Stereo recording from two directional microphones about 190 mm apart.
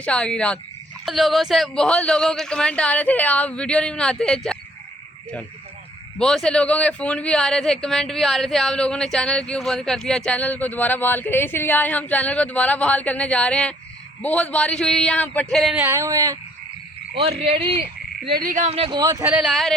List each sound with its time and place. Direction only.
0.0 s a man's voice: 5° left (ahead or behind)
6.1 s a man's voice: 5° left (ahead or behind)
15.8 s speech: 15° right (ahead or behind)
17.2 s speech: 30° right (ahead or behind)
18.3 s speech: 50° right (ahead or behind); by 19.3 s 20° right (ahead or behind)
19.3 s a man's voice: 5° right (ahead or behind)